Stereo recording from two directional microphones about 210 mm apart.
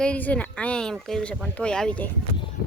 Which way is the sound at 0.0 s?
5° left (ahead or behind).